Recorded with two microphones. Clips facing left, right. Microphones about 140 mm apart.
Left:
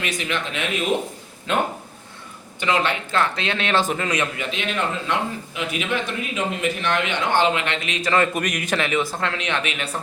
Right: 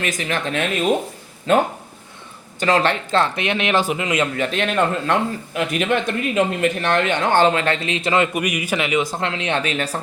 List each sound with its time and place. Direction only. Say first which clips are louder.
0.0 s a man's voice: right 3 dB; 45° right (ahead or behind); by 4.3 s 20° right (ahead or behind)
4.4 s a man's voice: right 6 dB; 50° right (ahead or behind)